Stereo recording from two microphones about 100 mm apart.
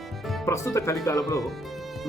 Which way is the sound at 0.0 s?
Centre (ahead or behind).